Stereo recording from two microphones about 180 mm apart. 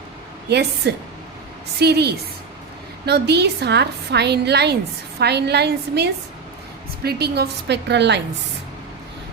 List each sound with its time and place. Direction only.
0.4 s a woman's voice: 65° right (ahead or behind)